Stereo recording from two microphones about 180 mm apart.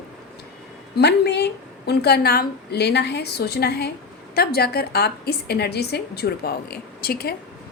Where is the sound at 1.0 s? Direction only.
65° left (ahead or behind).